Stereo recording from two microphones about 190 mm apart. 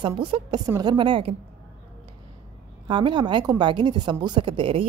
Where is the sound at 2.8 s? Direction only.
25° right (ahead or behind).